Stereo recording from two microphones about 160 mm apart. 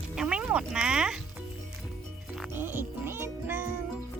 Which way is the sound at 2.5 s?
15° right (ahead or behind).